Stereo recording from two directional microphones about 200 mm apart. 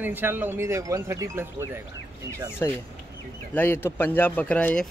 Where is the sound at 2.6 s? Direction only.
15° left (ahead or behind).